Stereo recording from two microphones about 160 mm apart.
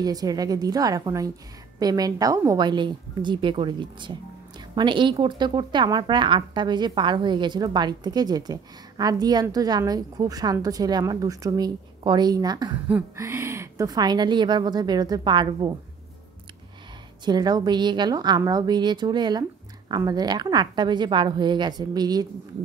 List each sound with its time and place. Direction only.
0.0 s speech: 25° right (ahead or behind)
12.8 s a sound: 10° right (ahead or behind)
13.2 s speech: 15° right (ahead or behind)
17.2 s speech: 25° right (ahead or behind)